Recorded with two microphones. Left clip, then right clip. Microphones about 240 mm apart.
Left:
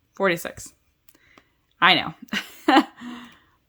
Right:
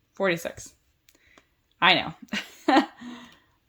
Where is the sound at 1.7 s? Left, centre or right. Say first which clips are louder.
Left 3 dB; left.